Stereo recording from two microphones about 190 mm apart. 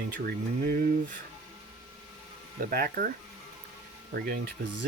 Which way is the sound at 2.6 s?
50° right (ahead or behind).